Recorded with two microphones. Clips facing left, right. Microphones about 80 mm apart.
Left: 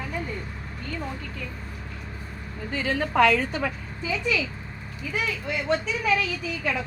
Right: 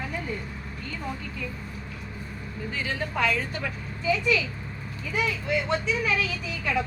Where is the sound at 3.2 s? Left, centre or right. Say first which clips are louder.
Left 7 dB; left.